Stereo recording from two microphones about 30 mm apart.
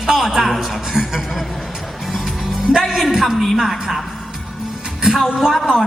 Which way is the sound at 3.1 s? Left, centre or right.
Centre.